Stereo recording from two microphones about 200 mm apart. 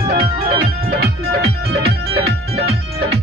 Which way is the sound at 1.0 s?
55° right (ahead or behind).